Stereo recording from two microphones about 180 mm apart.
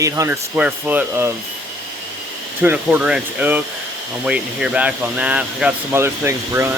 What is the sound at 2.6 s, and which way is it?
Speech, 10° right (ahead or behind).